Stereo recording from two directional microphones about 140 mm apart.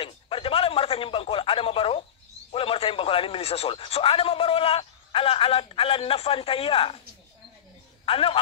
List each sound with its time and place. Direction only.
0.0 s a sound: 40° left (ahead or behind)
2.5 s a man's voice: 40° left (ahead or behind)
8.0 s a man's voice: 40° left (ahead or behind)